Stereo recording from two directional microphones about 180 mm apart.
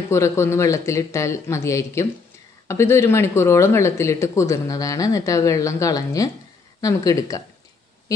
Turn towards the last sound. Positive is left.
turn(degrees=20)  # may be behind; listen again after turning